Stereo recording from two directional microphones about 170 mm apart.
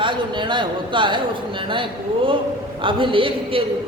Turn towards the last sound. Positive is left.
turn(degrees=-30)  # may be behind; listen again after turning